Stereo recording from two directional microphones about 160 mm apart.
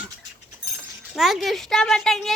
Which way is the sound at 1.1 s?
Centre (ahead or behind).